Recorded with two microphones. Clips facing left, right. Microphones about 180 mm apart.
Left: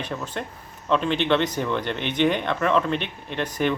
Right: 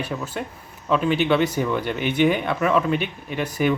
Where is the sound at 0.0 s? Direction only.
5° right (ahead or behind).